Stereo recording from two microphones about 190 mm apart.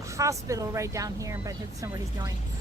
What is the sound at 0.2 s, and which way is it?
Speech, 15° right (ahead or behind).